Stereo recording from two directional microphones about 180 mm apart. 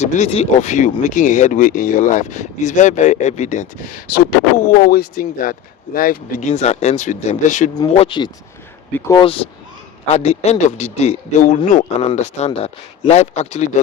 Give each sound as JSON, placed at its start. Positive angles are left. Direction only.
{"t": 0.0, "sound": "speech", "side_deg": 40}
{"t": 4.5, "sound": "speech", "side_deg": 45}
{"t": 7.9, "sound": "speech", "side_deg": 30}